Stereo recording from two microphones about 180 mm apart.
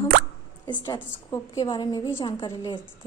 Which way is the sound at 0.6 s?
25° left (ahead or behind).